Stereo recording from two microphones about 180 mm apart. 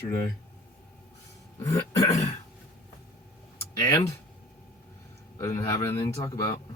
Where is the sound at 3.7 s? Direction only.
20° left (ahead or behind).